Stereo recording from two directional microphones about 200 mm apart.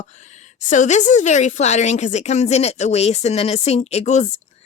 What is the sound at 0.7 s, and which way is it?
A woman's voice, 35° left (ahead or behind).